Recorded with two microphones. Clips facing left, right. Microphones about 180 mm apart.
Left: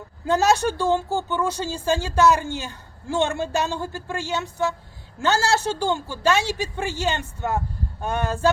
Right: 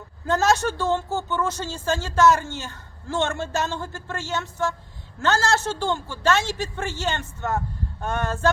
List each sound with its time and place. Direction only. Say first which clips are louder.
0.3 s a woman's voice: left 2 dB; 10° left (ahead or behind)